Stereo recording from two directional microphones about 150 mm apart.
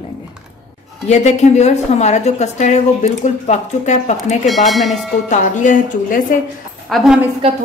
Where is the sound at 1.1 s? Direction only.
50° left (ahead or behind).